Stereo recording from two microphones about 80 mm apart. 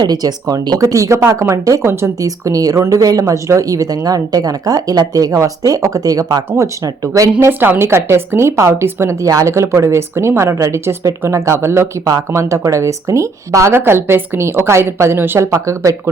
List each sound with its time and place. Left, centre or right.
0.0 s a woman's voice: right
2.2 s speech: right
6.6 s speech: right
7.3 s a woman's voice: right
13.7 s a woman's voice: right